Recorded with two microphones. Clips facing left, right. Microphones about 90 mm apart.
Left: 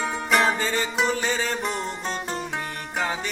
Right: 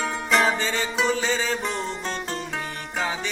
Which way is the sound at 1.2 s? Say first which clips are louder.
Right 1 dB; 10° left (ahead or behind).